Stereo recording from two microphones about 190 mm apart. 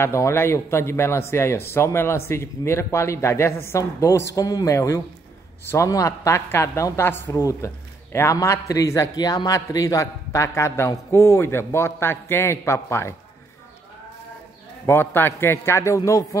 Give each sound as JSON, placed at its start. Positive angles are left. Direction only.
{"t": 0.0, "sound": "a woman's voice", "side_deg": 15}
{"t": 14.9, "sound": "a woman's voice", "side_deg": 10}